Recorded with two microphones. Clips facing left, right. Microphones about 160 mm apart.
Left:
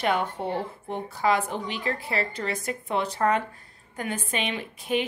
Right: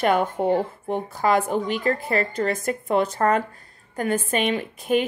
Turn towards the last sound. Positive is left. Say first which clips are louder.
# right 5 dB
turn(degrees=-45)  # may be behind; listen again after turning